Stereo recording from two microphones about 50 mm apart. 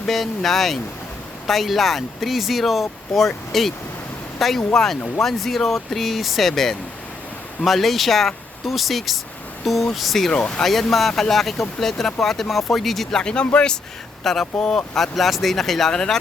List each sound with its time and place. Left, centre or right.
0.0 s speech: centre
10.3 s speech: centre
10.6 s speech: centre
13.1 s speech: centre
14.3 s speech: centre